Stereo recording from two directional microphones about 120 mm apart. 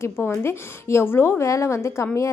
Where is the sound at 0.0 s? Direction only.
20° left (ahead or behind).